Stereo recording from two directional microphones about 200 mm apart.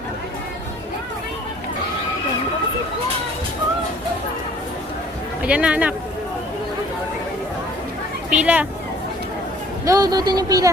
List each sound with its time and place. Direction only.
5.4 s speech: 5° right (ahead or behind)
8.3 s speech: 5° right (ahead or behind)
9.8 s speech: 15° right (ahead or behind)